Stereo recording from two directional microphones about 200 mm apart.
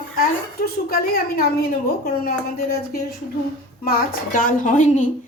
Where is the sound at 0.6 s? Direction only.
50° left (ahead or behind).